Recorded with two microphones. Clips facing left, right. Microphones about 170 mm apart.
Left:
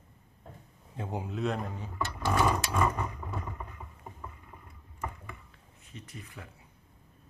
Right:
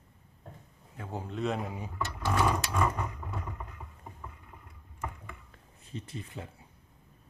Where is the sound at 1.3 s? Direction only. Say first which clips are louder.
Right 1 dB; centre (ahead or behind).